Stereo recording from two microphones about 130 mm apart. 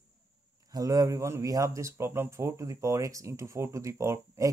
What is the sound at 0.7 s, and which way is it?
A man's voice, 30° right (ahead or behind).